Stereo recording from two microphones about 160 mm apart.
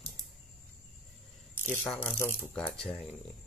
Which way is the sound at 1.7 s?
10° left (ahead or behind).